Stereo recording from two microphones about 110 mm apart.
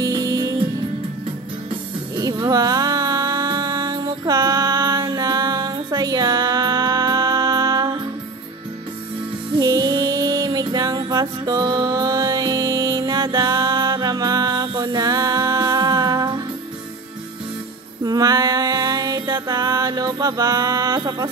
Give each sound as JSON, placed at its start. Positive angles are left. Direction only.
{"t": 0.0, "sound": "music", "side_deg": -30}
{"t": 2.1, "sound": "a sound", "side_deg": -40}
{"t": 9.6, "sound": "music", "side_deg": -35}
{"t": 18.0, "sound": "music", "side_deg": -35}